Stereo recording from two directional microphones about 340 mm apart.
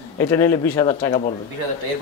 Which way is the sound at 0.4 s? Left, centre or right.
Centre.